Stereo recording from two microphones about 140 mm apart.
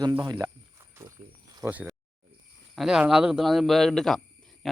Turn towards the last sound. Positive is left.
turn(degrees=5)  # may be behind; listen again after turning